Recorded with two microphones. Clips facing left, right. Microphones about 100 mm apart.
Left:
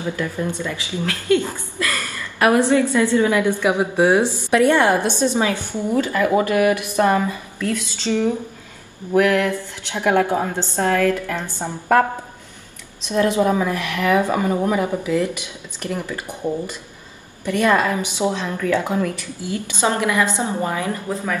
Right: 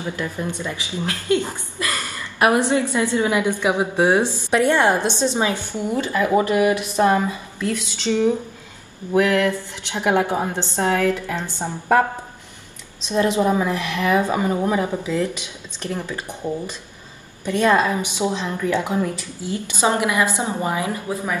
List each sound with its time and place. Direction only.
0.1 s a woman's voice: 15° right (ahead or behind)
4.2 s a woman's voice: 15° left (ahead or behind)
4.5 s a woman's voice: 20° right (ahead or behind)
13.1 s a woman's voice: 20° right (ahead or behind)
17.5 s a woman's voice: 20° right (ahead or behind)